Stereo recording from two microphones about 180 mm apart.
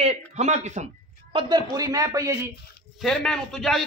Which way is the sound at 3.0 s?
5° left (ahead or behind).